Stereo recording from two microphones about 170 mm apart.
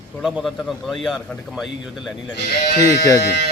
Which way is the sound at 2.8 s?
20° left (ahead or behind).